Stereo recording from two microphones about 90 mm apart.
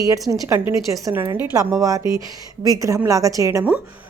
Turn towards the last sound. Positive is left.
turn(degrees=-35)  # may be behind; listen again after turning